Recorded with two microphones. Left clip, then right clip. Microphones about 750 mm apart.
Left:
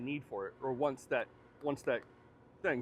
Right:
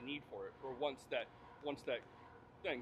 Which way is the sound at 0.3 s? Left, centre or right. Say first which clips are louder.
Left 9 dB; left.